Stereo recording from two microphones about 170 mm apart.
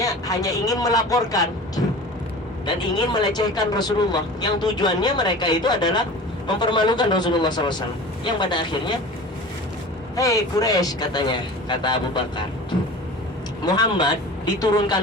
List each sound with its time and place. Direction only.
0.0 s speech: 20° left (ahead or behind)
10.2 s speech: 20° left (ahead or behind)
13.7 s speech: 25° left (ahead or behind)